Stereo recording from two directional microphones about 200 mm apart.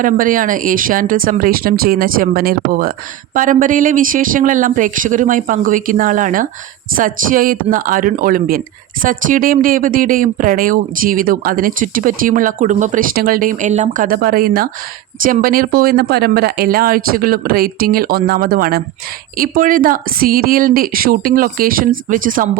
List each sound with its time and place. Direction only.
0.0 s speech: 45° right (ahead or behind)